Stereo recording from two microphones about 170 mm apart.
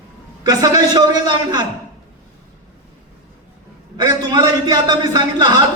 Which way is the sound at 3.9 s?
20° right (ahead or behind).